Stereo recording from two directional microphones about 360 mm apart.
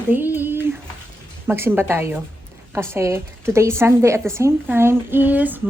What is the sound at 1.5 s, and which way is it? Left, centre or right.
A woman's voice, centre.